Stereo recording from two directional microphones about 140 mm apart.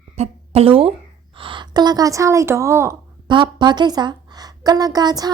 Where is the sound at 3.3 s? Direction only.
35° right (ahead or behind).